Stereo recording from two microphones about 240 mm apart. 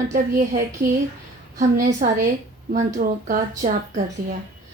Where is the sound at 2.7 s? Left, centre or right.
Right.